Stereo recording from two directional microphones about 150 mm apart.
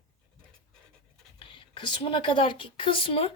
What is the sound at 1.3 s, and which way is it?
Speech, 35° left (ahead or behind).